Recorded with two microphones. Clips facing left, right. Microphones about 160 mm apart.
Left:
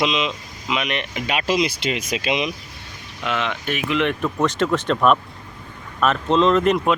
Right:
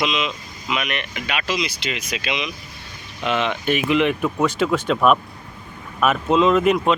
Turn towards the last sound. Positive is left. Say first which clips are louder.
# even
turn(degrees=-5)  # may be behind; listen again after turning